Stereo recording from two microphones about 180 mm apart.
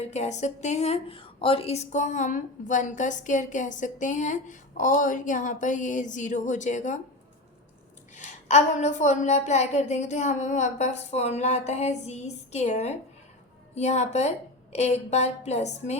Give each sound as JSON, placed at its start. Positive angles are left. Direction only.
{"t": 0.1, "sound": "a woman's voice", "side_deg": 40}
{"t": 8.1, "sound": "a woman's voice", "side_deg": 40}